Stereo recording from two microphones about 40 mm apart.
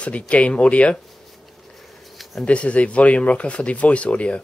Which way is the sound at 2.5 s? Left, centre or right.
Left.